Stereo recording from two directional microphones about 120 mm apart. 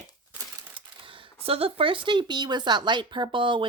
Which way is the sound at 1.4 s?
50° right (ahead or behind).